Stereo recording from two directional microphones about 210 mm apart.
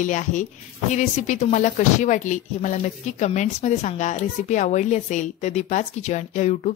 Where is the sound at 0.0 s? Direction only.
35° left (ahead or behind).